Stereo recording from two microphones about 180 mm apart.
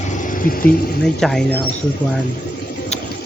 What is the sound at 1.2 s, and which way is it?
Speech, 5° left (ahead or behind).